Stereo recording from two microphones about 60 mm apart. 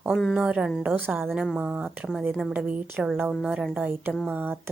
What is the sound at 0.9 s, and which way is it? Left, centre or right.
A woman's voice, right.